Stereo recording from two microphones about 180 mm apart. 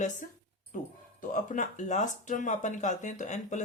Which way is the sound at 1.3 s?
45° left (ahead or behind).